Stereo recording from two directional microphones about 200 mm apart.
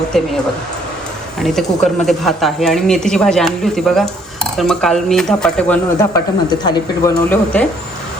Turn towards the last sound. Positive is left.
turn(degrees=5)  # may be behind; listen again after turning